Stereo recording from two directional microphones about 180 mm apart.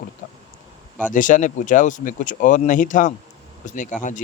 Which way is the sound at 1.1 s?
45° left (ahead or behind).